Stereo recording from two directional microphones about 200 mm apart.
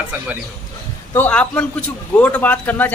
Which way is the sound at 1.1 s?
5° left (ahead or behind).